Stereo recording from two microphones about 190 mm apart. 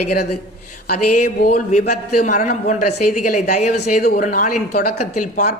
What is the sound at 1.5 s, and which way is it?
A woman's voice, 35° left (ahead or behind).